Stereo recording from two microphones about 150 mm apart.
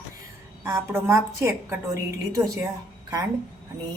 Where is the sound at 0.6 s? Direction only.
20° right (ahead or behind).